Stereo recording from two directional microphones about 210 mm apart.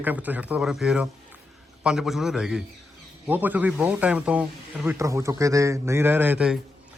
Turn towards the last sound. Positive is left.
turn(degrees=-5)  # may be behind; listen again after turning